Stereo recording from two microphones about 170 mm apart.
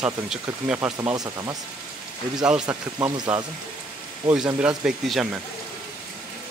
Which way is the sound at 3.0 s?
20° right (ahead or behind).